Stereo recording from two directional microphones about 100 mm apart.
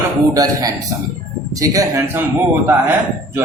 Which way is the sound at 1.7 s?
35° right (ahead or behind).